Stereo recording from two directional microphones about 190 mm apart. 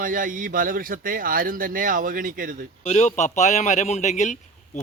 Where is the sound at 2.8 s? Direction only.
35° left (ahead or behind).